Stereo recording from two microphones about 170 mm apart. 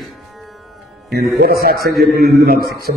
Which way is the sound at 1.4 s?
65° right (ahead or behind).